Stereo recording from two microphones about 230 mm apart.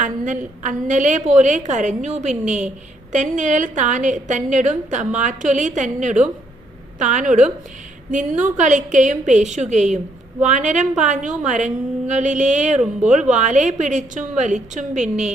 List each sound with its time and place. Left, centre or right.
0.0 s a woman's voice: right